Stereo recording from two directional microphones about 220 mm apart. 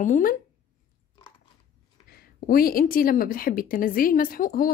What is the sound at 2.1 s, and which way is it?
A woman's voice, 40° left (ahead or behind).